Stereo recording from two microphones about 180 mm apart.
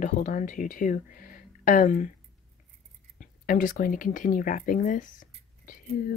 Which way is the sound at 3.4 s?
50° left (ahead or behind).